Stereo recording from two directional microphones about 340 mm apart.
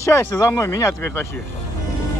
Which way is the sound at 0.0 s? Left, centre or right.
Centre.